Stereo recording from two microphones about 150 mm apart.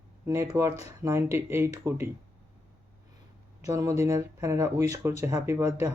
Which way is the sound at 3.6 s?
20° right (ahead or behind).